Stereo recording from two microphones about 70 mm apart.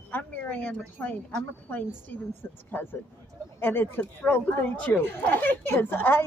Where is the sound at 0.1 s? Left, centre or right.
Left.